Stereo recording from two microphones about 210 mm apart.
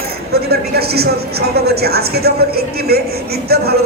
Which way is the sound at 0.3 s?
50° right (ahead or behind).